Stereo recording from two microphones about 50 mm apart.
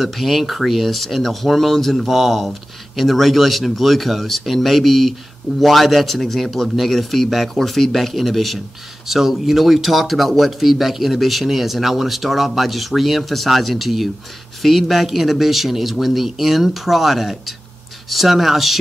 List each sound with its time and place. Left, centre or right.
0.0 s speech: centre